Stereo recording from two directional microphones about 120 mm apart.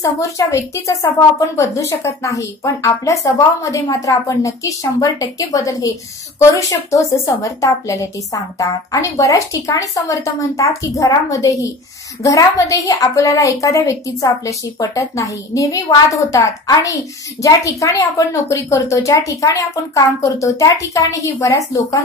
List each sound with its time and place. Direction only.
0.0 s a woman's voice: 25° left (ahead or behind)